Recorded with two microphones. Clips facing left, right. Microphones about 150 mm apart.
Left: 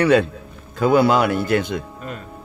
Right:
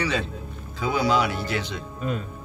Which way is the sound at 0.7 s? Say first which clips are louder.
Left 7 dB; 55° left (ahead or behind).